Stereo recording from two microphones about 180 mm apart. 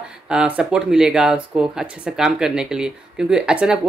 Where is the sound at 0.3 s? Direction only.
5° right (ahead or behind).